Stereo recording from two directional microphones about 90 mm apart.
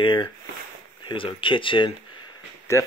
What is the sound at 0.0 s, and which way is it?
Speech, 65° left (ahead or behind).